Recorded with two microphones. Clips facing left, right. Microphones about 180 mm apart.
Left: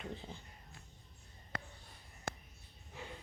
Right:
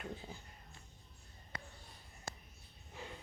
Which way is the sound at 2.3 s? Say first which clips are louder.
Left 5 dB; 60° left (ahead or behind).